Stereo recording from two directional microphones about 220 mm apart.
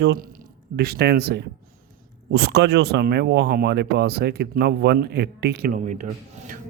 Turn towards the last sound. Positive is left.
turn(degrees=-35)  # may be behind; listen again after turning